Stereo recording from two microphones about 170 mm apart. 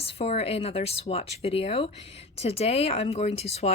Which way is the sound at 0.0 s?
35° left (ahead or behind).